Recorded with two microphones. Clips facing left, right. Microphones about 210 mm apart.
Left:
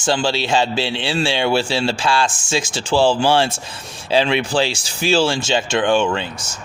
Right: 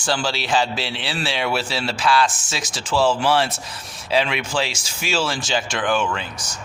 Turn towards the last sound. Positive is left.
turn(degrees=30)  # may be behind; listen again after turning